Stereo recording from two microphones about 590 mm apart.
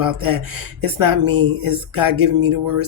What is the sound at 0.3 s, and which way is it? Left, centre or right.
Speech, right.